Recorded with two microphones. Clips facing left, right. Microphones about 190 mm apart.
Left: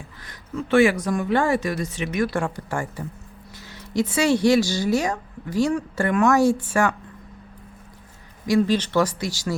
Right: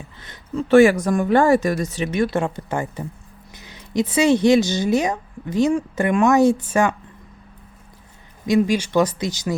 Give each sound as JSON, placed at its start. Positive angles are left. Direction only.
{"t": 0.2, "sound": "a sound", "side_deg": -25}
{"t": 0.7, "sound": "speech", "side_deg": -45}
{"t": 2.0, "sound": "speech", "side_deg": -25}
{"t": 3.5, "sound": "a sound", "side_deg": -20}
{"t": 4.1, "sound": "speech", "side_deg": -20}
{"t": 8.4, "sound": "speech", "side_deg": -15}